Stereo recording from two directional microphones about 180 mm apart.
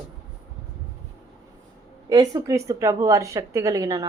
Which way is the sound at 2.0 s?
20° right (ahead or behind).